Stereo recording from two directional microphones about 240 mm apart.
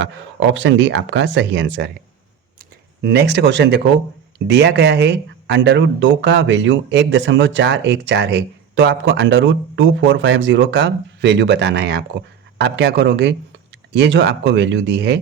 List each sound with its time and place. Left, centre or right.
0.0 s speech: right
3.0 s speech: right